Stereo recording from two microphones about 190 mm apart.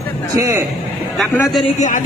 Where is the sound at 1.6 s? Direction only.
40° left (ahead or behind).